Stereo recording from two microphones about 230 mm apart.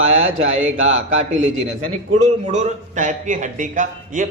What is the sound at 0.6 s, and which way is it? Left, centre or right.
Speech, right.